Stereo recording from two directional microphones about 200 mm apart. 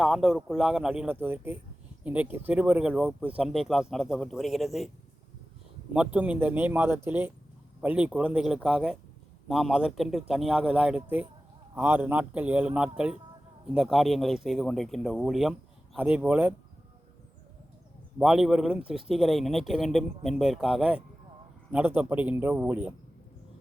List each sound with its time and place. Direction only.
0.0 s speech: centre (ahead or behind)
5.9 s speech: 5° right (ahead or behind)
18.2 s speech: 5° right (ahead or behind)